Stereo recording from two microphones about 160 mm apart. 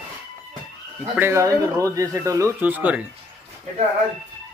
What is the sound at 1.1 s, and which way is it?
Speech, 15° right (ahead or behind).